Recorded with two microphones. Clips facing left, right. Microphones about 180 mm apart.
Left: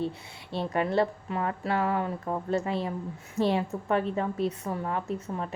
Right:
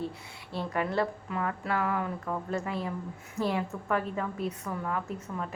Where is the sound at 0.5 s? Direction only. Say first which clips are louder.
Left 4 dB; 25° left (ahead or behind).